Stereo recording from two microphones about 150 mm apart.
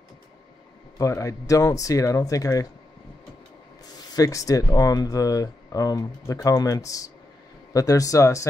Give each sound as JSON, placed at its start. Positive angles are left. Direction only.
{"t": 0.9, "sound": "speech", "side_deg": 20}
{"t": 4.1, "sound": "speech", "side_deg": 25}